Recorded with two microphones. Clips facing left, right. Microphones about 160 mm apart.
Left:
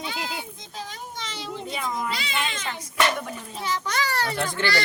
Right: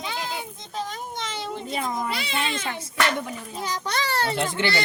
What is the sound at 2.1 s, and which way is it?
Cat, 55° right (ahead or behind).